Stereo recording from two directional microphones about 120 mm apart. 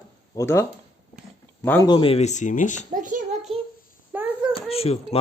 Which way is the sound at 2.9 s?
90° right.